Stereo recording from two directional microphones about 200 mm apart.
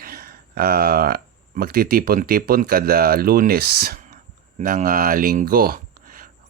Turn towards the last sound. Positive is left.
turn(degrees=-45)  # may be behind; listen again after turning